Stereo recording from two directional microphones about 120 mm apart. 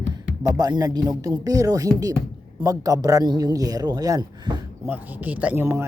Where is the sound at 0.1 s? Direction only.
35° right (ahead or behind).